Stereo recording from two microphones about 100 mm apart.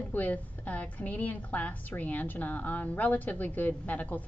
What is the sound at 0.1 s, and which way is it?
A woman's voice, 15° left (ahead or behind).